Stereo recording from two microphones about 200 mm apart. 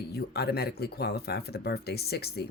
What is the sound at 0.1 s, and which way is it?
Speech, 55° left (ahead or behind).